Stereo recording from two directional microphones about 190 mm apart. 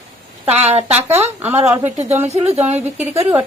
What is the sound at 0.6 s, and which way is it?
Speech, 35° right (ahead or behind).